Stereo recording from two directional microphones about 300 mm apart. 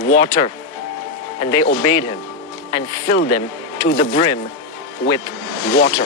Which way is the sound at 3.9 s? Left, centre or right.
Centre.